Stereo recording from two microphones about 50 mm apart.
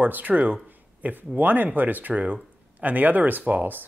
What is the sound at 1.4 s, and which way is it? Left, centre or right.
Speech, right.